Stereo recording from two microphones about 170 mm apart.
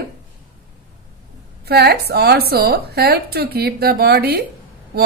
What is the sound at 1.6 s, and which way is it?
Speech, 70° right (ahead or behind).